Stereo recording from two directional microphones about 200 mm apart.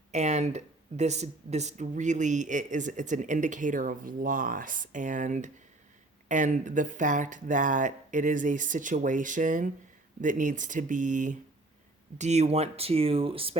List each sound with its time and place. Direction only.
0.1 s speech: 35° right (ahead or behind)